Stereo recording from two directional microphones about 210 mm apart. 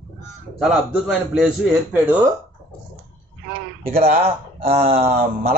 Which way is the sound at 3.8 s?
30° right (ahead or behind).